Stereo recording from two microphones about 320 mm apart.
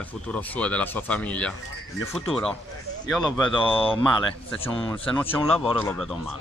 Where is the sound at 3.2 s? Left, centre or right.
Centre.